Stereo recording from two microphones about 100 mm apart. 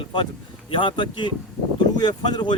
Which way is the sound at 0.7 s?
55° left (ahead or behind).